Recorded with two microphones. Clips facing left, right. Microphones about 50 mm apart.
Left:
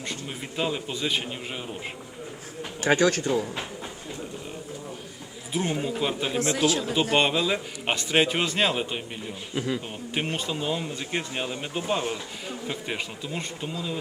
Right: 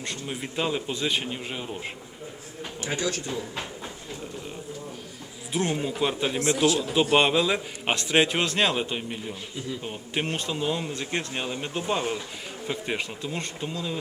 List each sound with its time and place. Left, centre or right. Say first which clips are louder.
0.0 s speech: right 1 dB; centre
2.8 s speech: left 8 dB; left
5.5 s speech: right 1 dB; centre